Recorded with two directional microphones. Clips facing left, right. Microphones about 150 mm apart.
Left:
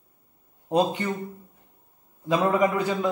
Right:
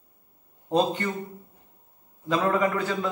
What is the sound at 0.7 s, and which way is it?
Speech, 10° left (ahead or behind).